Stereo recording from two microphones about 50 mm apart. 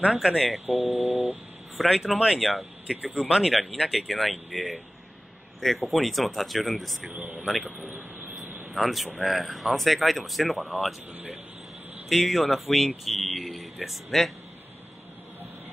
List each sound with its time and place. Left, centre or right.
0.1 s speech: centre
0.9 s a sound: right
1.8 s speech: centre
2.9 s speech: right
3.3 s speech: centre
7.2 s a sound: right
7.4 s speech: centre
7.7 s speech: right
8.7 s speech: centre
12.1 s speech: centre